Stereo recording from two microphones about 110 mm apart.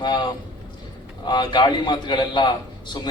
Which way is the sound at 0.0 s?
45° left (ahead or behind).